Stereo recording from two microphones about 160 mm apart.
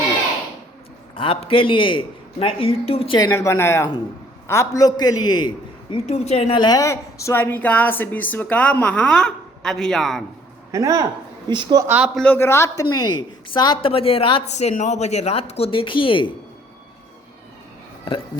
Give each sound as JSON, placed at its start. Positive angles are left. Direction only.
{"t": 1.1, "sound": "a woman's voice", "side_deg": 35}
{"t": 3.2, "sound": "a man's voice", "side_deg": 20}
{"t": 6.1, "sound": "a woman's voice", "side_deg": 40}
{"t": 10.7, "sound": "speech", "side_deg": -20}
{"t": 11.9, "sound": "a man's voice", "side_deg": -5}
{"t": 12.2, "sound": "a woman's voice", "side_deg": 15}